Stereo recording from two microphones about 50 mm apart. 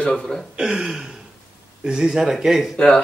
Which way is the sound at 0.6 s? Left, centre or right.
Centre.